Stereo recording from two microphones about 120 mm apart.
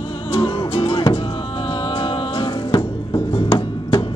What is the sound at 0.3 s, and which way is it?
Music, 45° left (ahead or behind).